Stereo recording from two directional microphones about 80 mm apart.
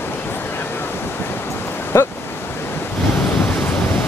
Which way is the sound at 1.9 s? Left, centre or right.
Left.